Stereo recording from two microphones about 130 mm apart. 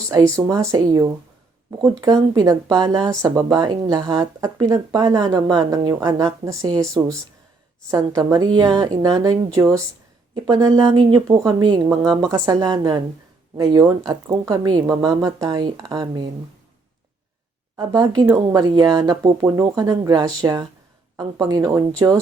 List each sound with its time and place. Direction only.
0.1 s speech: 25° right (ahead or behind)
14.1 s speech: 25° right (ahead or behind)
17.7 s speech: 35° right (ahead or behind)